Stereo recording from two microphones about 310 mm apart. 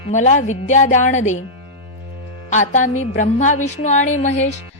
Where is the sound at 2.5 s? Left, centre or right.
Left.